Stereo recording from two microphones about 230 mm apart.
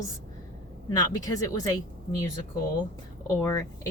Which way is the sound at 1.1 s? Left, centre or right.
Centre.